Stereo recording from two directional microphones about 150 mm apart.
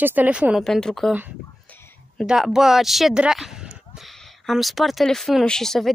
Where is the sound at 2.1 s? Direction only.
5° right (ahead or behind).